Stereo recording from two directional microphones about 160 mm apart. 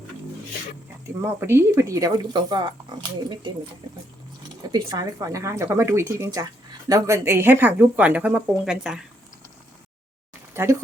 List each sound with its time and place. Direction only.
1.0 s speech: 15° right (ahead or behind)
3.8 s speech: 25° right (ahead or behind); by 9.0 s 5° right (ahead or behind)
10.5 s speech: 15° right (ahead or behind)